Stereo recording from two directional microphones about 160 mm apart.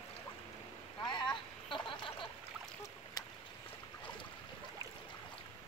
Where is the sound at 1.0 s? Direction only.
30° left (ahead or behind).